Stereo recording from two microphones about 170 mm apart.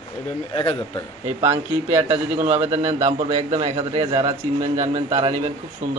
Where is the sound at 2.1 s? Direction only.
40° right (ahead or behind).